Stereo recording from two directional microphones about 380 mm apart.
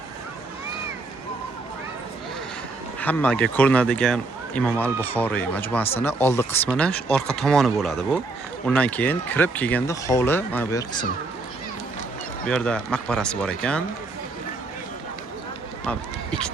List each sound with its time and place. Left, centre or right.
3.0 s speech: centre
12.5 s speech: centre
15.9 s speech: centre